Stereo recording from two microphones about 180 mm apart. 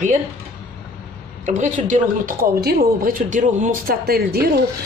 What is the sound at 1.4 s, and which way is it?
Speech, 45° right (ahead or behind).